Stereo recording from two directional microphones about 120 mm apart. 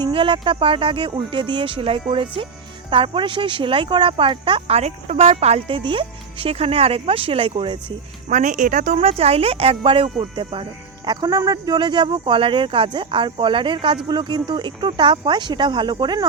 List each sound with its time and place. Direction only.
0.0 s speech: 45° right (ahead or behind)
4.8 s speech: 60° right (ahead or behind); by 7.9 s 45° right (ahead or behind)
8.3 s speech: 90° right
9.0 s speech: 60° right (ahead or behind); by 16.2 s 40° right (ahead or behind)